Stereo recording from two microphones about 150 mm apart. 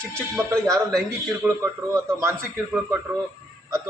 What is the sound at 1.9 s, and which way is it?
Speech, 20° right (ahead or behind).